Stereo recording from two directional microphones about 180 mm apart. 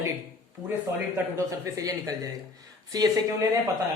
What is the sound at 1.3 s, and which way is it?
Speech, 20° right (ahead or behind).